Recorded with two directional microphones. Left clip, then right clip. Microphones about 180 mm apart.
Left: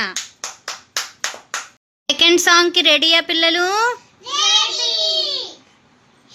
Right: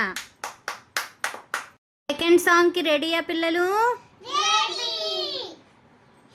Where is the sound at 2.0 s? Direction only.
5° right (ahead or behind).